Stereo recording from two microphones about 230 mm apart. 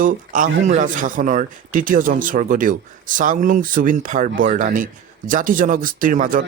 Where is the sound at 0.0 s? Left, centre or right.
Right.